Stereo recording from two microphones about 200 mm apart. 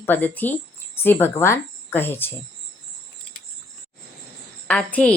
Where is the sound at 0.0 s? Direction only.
10° left (ahead or behind).